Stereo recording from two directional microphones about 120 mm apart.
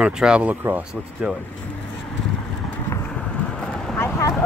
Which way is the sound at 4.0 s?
25° left (ahead or behind).